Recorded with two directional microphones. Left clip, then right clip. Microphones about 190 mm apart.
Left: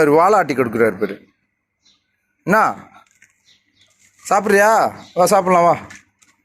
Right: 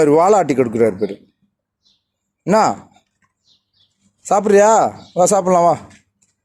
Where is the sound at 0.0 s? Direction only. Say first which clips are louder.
Right 1 dB; 30° right (ahead or behind).